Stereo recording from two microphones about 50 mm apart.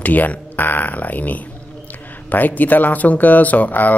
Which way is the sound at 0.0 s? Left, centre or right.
Left.